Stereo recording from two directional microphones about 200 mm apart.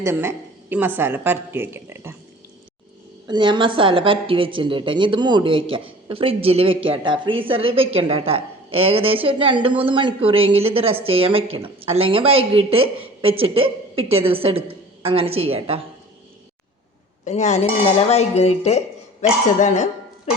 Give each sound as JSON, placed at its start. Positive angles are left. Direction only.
{"t": 0.0, "sound": "a woman's voice", "side_deg": -10}
{"t": 3.2, "sound": "a woman's voice", "side_deg": -25}
{"t": 17.2, "sound": "a sound", "side_deg": 35}